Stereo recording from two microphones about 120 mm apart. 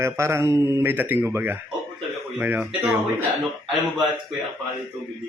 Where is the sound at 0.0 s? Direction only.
25° right (ahead or behind).